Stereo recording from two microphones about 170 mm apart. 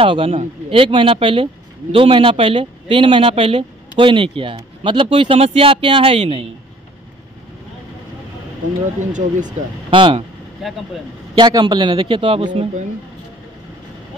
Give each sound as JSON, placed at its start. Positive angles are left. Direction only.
{"t": 0.0, "sound": "speech", "side_deg": -35}
{"t": 9.1, "sound": "speech", "side_deg": -45}
{"t": 9.8, "sound": "speech", "side_deg": -30}
{"t": 10.6, "sound": "speech", "side_deg": 0}
{"t": 11.3, "sound": "a man's voice", "side_deg": -25}